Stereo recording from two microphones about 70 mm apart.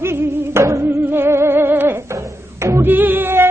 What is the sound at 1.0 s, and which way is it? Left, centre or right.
Music, right.